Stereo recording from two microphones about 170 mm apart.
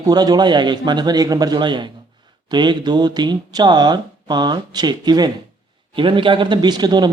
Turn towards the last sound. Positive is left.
turn(degrees=-25)  # may be behind; listen again after turning